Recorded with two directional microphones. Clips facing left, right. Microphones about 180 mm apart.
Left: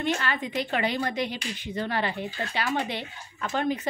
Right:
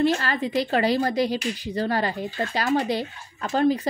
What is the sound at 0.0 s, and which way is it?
A woman's voice, 35° right (ahead or behind).